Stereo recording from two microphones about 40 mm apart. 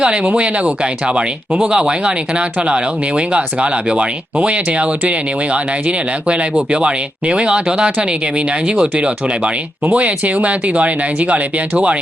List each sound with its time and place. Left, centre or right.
0.0 s speech: right